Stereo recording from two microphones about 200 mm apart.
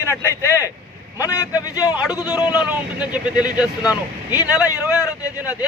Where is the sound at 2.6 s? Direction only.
5° right (ahead or behind).